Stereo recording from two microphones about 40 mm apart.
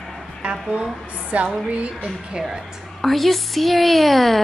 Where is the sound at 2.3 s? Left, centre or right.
Centre.